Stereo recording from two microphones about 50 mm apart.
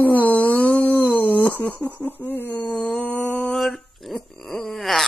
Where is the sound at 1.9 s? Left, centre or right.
Left.